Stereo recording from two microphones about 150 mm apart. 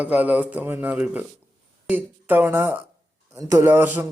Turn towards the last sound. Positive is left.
turn(degrees=-15)  # may be behind; listen again after turning